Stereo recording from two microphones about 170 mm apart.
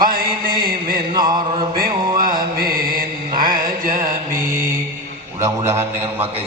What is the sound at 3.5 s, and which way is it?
Mantra, 55° right (ahead or behind).